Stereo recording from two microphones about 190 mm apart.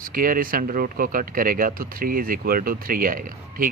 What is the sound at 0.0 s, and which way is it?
Speech, 50° right (ahead or behind).